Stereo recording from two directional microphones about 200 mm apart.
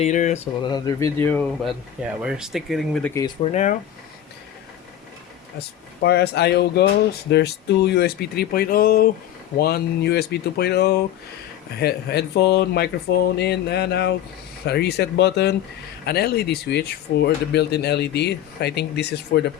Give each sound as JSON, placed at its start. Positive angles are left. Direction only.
{"t": 0.0, "sound": "speech", "side_deg": 35}
{"t": 0.6, "sound": "speech", "side_deg": 20}
{"t": 2.2, "sound": "speech", "side_deg": -5}
{"t": 3.2, "sound": "speech", "side_deg": 20}
{"t": 3.5, "sound": "speech", "side_deg": 35}
{"t": 5.5, "sound": "speech", "side_deg": 55}